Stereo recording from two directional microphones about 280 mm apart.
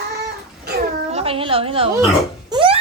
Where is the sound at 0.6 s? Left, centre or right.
Right.